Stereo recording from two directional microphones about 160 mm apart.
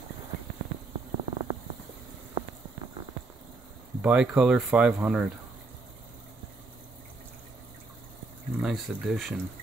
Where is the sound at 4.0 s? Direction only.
5° right (ahead or behind).